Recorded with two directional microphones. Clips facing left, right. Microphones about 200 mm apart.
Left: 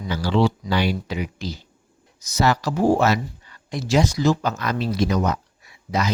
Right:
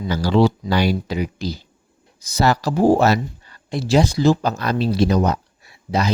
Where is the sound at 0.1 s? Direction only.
40° right (ahead or behind).